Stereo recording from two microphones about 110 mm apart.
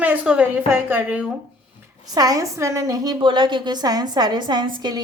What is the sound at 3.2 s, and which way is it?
A woman's voice, 45° right (ahead or behind).